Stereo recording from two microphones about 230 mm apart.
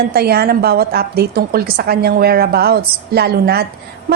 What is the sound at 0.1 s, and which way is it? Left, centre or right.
A woman's voice, right.